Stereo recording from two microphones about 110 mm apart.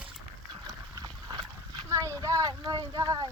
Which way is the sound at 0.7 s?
35° right (ahead or behind).